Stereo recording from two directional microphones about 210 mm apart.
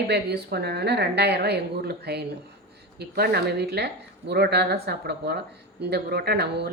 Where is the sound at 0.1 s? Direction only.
50° right (ahead or behind).